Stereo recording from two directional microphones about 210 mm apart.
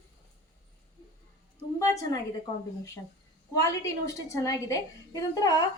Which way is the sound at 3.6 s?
15° left (ahead or behind).